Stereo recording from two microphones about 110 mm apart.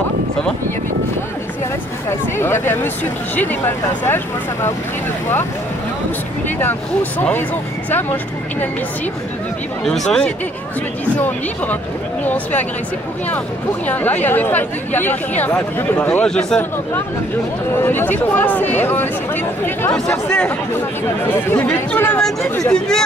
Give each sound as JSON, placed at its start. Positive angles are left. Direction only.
{"t": 2.0, "sound": "speech", "side_deg": 20}
{"t": 6.6, "sound": "speech", "side_deg": 15}
{"t": 9.8, "sound": "speech", "side_deg": 5}
{"t": 13.8, "sound": "speech", "side_deg": 15}
{"t": 17.8, "sound": "speech", "side_deg": 20}